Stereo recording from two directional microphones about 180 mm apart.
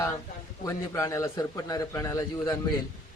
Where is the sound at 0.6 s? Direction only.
15° left (ahead or behind).